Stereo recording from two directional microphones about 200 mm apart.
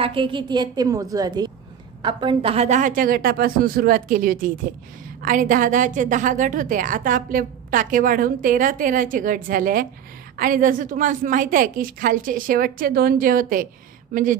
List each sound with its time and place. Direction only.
0.0 s a woman's voice: 25° right (ahead or behind); by 13.7 s 45° right (ahead or behind)